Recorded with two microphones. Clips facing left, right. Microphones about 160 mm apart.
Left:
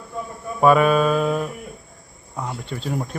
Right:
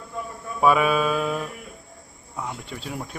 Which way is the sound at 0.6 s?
5° right (ahead or behind).